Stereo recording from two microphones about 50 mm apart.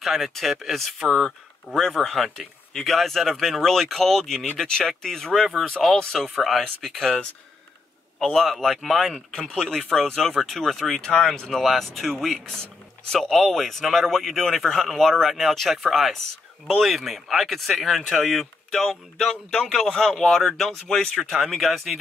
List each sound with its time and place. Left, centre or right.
0.0 s speech: centre
8.2 s speech: centre
11.0 s speech: centre
21.4 s speech: centre